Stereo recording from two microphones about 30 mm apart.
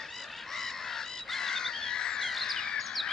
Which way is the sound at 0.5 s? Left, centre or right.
Centre.